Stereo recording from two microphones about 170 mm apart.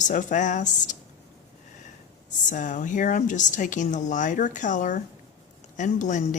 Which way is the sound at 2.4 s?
45° left (ahead or behind).